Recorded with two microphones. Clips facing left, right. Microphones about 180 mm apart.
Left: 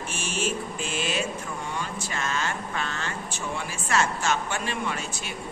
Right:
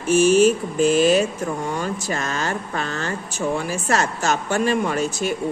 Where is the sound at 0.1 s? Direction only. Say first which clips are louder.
Right 17 dB; 40° right (ahead or behind).